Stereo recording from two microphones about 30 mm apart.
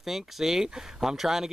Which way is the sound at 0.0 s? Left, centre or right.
Centre.